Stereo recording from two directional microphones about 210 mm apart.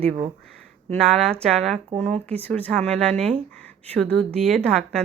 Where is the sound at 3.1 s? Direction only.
30° right (ahead or behind).